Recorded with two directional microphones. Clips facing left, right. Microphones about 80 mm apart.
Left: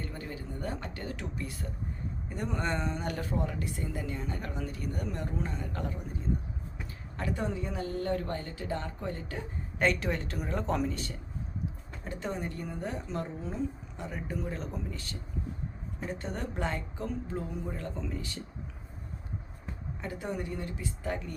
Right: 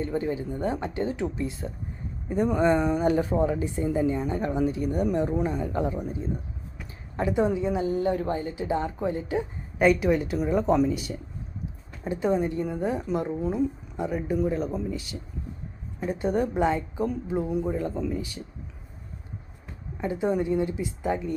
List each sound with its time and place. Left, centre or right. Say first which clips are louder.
0.0 s a woman's voice: right 12 dB; right
7.2 s a woman's voice: right 10 dB; centre
20.0 s speech: right 11 dB; right